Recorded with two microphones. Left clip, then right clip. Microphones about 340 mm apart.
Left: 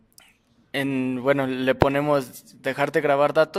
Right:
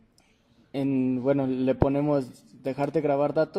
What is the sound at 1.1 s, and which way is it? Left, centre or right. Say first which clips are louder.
A man's voice: left 7 dB; left.